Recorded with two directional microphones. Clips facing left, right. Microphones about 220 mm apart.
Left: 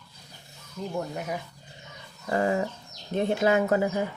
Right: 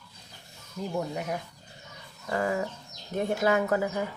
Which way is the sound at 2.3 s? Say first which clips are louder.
Left 3 dB; 25° left (ahead or behind).